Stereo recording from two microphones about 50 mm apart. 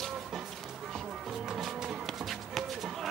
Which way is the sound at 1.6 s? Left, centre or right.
Centre.